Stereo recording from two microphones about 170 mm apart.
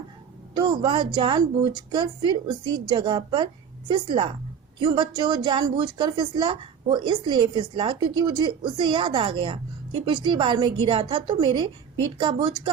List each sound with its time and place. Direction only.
0.5 s a woman's voice: 30° right (ahead or behind)